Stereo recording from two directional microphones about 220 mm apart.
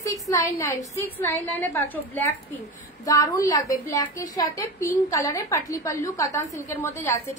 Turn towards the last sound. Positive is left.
turn(degrees=10)  # may be behind; listen again after turning